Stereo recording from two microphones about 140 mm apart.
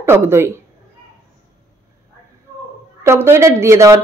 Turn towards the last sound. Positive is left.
turn(degrees=-20)  # may be behind; listen again after turning